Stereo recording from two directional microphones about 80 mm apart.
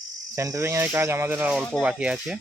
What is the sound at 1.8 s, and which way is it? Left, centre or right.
Speech, centre.